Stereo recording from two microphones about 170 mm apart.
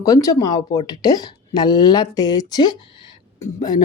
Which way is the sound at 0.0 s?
20° left (ahead or behind).